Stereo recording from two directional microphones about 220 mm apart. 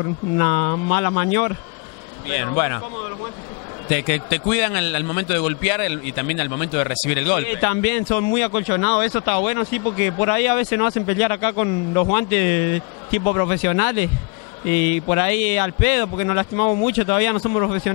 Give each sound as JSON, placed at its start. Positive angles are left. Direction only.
{"t": 0.4, "sound": "a man's voice", "side_deg": 20}
{"t": 3.9, "sound": "a man's voice", "side_deg": 10}
{"t": 15.0, "sound": "a man's voice", "side_deg": 15}